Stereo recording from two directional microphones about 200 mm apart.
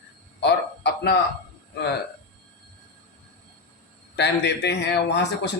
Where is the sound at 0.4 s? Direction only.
60° left (ahead or behind).